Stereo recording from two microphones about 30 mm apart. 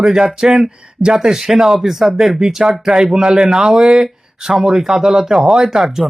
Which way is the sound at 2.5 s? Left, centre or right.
Centre.